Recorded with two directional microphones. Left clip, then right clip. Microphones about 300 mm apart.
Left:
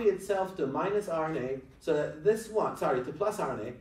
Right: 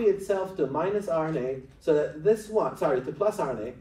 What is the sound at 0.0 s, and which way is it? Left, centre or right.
A man's voice, right.